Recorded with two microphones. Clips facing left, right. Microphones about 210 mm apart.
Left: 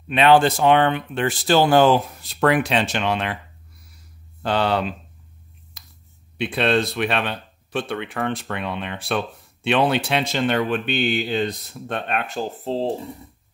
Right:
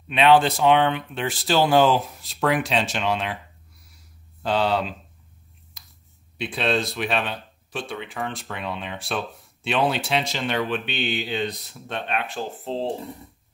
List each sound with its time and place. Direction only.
0.3 s speech: centre (ahead or behind)
3.9 s a sound: centre (ahead or behind)
6.3 s speech: centre (ahead or behind)
7.9 s speech: 60° left (ahead or behind)
8.2 s speech: centre (ahead or behind)